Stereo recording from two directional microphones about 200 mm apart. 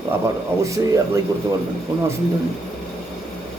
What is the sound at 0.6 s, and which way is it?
Speech, 15° right (ahead or behind).